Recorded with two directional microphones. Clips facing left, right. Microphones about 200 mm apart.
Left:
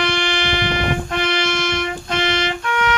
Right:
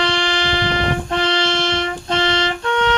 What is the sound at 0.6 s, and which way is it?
Music, 30° right (ahead or behind).